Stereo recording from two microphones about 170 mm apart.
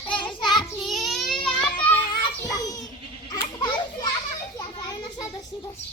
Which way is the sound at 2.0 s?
20° left (ahead or behind).